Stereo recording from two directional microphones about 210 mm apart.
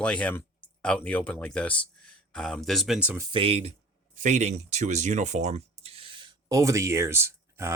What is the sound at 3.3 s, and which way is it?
Speech, 25° right (ahead or behind).